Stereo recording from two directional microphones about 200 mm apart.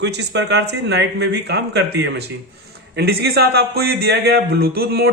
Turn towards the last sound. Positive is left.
turn(degrees=-50)  # may be behind; listen again after turning